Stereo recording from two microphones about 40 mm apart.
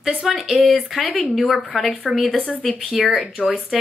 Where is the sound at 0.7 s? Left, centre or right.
Centre.